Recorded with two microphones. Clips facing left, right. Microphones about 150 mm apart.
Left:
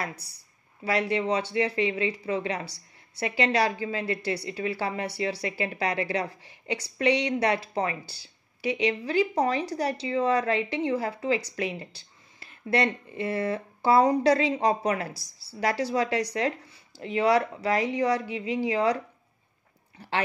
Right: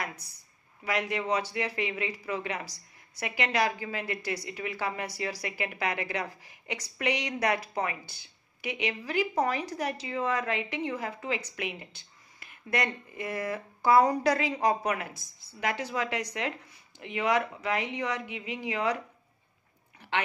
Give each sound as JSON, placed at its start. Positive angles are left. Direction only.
{"t": 0.0, "sound": "speech", "side_deg": 35}
{"t": 20.0, "sound": "speech", "side_deg": 35}